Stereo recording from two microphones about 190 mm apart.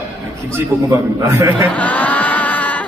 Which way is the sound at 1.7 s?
10° left (ahead or behind).